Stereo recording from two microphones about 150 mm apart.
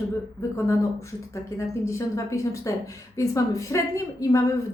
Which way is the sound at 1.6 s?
20° left (ahead or behind).